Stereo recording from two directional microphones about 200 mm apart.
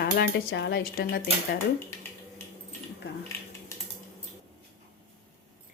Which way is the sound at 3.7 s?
15° left (ahead or behind).